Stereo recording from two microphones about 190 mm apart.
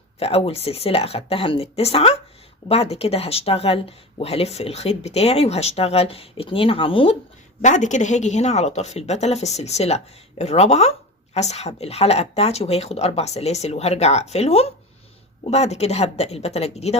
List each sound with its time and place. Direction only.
0.2 s speech: 30° left (ahead or behind)
7.6 s speech: 40° left (ahead or behind)